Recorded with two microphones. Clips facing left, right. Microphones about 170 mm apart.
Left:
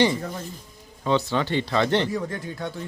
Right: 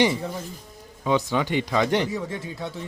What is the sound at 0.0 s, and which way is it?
Speech, 5° right (ahead or behind).